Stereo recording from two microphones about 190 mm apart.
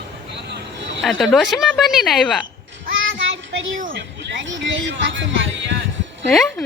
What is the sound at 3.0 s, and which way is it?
Child singing, 80° right.